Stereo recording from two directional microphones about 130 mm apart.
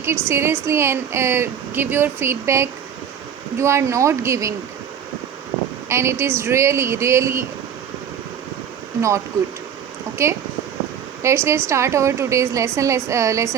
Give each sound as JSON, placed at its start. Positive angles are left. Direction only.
{"t": 0.0, "sound": "speech", "side_deg": -20}
{"t": 5.9, "sound": "speech", "side_deg": -20}
{"t": 9.0, "sound": "speech", "side_deg": -20}